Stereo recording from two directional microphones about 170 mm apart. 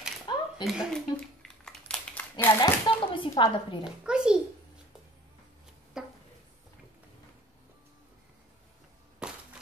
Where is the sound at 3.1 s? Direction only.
30° left (ahead or behind).